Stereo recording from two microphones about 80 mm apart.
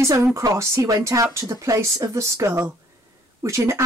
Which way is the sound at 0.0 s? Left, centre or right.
Right.